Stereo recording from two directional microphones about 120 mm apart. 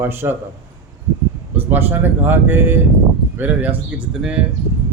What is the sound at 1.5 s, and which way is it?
Speech, 15° right (ahead or behind).